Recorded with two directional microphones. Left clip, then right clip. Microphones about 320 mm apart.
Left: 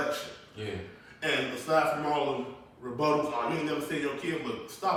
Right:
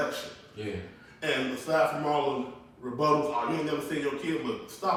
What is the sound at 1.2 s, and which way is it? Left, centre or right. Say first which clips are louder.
Speech: even; centre.